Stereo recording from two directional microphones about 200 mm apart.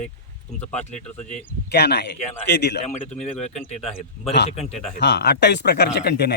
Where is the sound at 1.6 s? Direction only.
55° left (ahead or behind).